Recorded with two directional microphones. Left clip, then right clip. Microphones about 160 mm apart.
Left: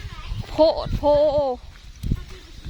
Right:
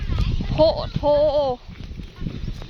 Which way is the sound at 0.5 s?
25° left (ahead or behind).